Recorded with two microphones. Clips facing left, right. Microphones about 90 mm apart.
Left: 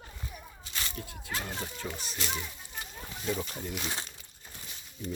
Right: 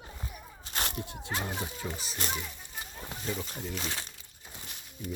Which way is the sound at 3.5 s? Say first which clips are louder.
Even; 5° left (ahead or behind).